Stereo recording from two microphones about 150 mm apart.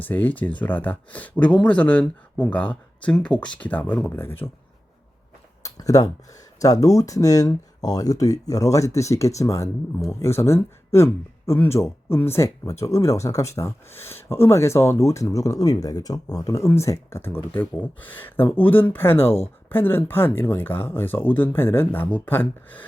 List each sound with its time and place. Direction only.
0.0 s speech: 10° left (ahead or behind)
5.6 s speech: 25° left (ahead or behind)